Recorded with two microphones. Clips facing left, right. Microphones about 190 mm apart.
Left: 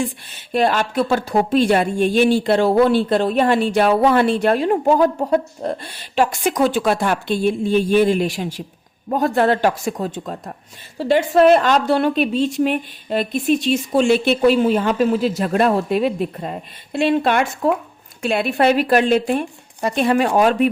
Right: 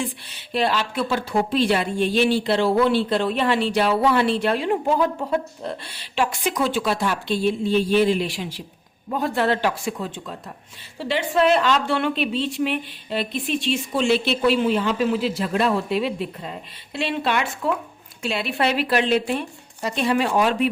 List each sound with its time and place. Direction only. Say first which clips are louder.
0.5 s a woman's voice: left 5 dB; 50° left (ahead or behind)